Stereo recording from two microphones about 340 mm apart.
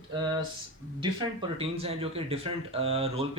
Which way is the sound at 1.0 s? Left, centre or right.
Centre.